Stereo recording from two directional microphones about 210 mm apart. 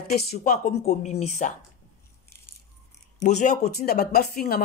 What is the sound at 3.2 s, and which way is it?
Speech, 35° left (ahead or behind).